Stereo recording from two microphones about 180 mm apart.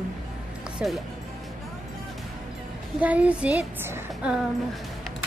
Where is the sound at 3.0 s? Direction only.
5° right (ahead or behind).